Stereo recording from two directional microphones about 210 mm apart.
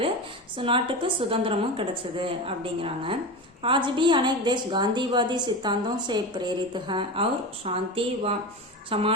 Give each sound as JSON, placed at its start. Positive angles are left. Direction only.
{"t": 0.5, "sound": "a woman's voice", "side_deg": -25}